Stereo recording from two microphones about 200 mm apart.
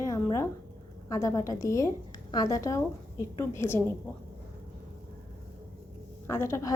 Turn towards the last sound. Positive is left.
turn(degrees=15)  # may be behind; listen again after turning